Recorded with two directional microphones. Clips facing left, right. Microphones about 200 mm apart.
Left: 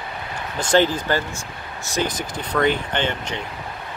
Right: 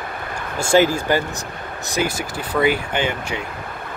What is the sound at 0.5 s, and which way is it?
Speech, 10° right (ahead or behind).